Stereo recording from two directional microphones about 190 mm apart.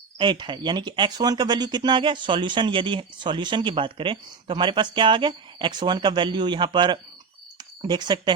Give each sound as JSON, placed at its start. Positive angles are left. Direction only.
{"t": 0.2, "sound": "speech", "side_deg": -25}